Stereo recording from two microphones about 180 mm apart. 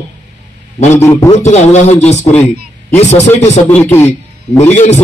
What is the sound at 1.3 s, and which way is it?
Speech, 40° left (ahead or behind).